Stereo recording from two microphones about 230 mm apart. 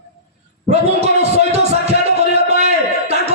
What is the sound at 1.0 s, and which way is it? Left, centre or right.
Music, right.